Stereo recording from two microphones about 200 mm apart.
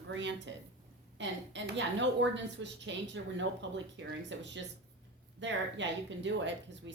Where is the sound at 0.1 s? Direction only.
65° right (ahead or behind).